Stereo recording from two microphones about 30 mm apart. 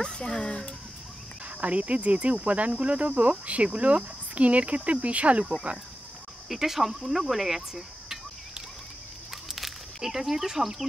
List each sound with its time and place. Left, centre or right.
0.0 s speech: left
1.6 s speech: right
6.5 s speech: centre
9.3 s a sound: centre